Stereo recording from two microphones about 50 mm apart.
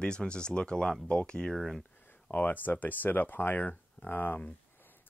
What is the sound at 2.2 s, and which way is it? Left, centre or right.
Speech, left.